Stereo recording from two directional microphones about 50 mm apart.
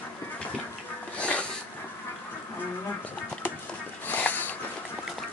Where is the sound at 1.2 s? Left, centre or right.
Left.